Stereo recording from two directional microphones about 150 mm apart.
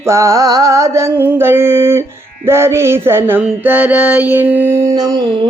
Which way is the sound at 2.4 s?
15° right (ahead or behind).